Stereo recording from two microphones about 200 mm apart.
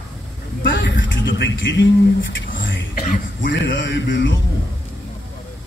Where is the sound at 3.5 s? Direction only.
65° left (ahead or behind).